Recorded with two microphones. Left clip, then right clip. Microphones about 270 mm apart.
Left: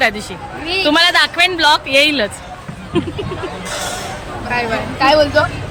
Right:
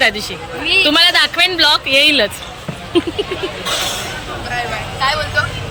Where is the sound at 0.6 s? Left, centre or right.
Centre.